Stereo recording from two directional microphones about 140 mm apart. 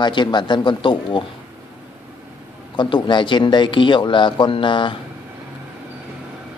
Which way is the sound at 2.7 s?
35° left (ahead or behind).